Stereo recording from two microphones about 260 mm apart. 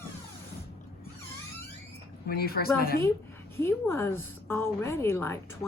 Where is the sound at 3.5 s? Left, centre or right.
Centre.